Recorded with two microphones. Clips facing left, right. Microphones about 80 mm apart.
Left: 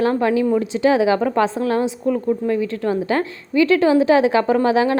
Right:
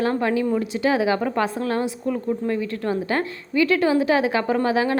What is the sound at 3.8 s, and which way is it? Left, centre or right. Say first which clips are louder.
A woman's voice: left 5 dB; left.